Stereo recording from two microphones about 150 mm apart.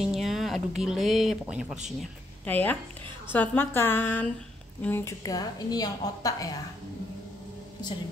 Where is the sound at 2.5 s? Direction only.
10° left (ahead or behind).